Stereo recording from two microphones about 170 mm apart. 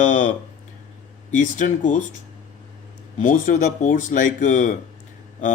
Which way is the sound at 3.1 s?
50° left (ahead or behind).